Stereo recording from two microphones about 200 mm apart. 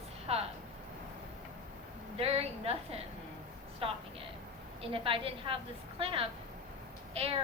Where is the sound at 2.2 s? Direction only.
30° right (ahead or behind).